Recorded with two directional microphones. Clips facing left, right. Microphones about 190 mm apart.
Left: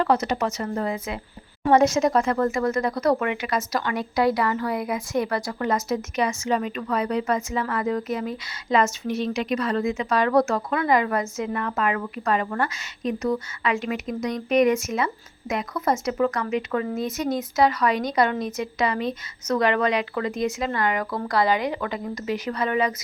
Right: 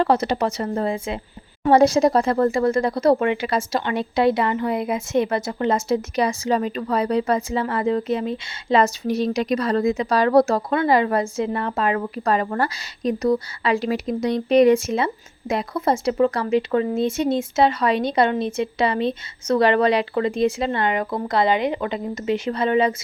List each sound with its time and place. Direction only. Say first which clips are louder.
0.0 s speech: right 3 dB; 30° right (ahead or behind)